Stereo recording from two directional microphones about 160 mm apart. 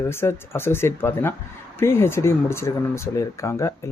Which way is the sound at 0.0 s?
15° left (ahead or behind).